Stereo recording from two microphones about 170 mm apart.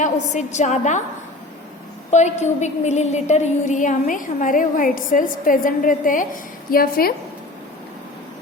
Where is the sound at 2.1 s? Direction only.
40° left (ahead or behind); by 7.1 s 60° left (ahead or behind).